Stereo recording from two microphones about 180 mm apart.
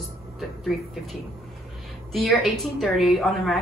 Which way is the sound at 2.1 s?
Centre (ahead or behind).